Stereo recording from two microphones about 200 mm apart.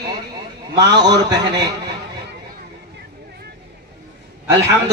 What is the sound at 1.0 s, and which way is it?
Speech, 20° right (ahead or behind).